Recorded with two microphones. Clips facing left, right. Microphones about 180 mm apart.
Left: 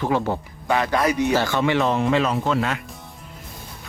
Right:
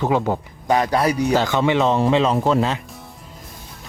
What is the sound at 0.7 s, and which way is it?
Speech, 40° right (ahead or behind).